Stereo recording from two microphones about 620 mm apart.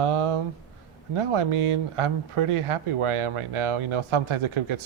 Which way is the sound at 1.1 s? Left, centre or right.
Right.